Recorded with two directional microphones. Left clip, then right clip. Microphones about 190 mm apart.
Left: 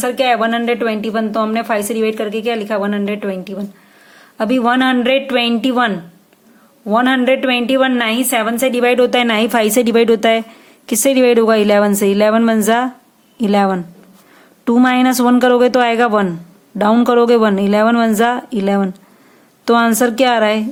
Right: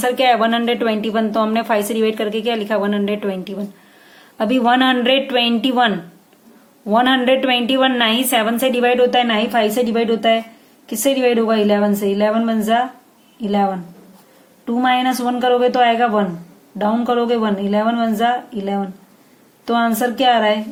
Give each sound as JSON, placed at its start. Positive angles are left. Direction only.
{"t": 0.0, "sound": "a woman's voice", "side_deg": 25}